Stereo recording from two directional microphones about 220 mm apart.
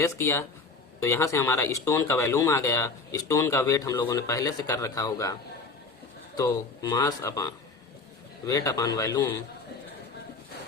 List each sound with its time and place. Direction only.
0.0 s speech: 10° left (ahead or behind)